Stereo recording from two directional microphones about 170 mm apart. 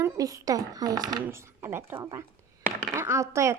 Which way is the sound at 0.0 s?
20° right (ahead or behind).